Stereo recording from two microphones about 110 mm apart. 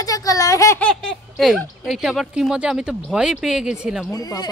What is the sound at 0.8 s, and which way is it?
Speech, 5° left (ahead or behind).